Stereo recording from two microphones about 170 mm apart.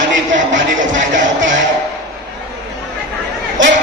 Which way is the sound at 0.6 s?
50° right (ahead or behind).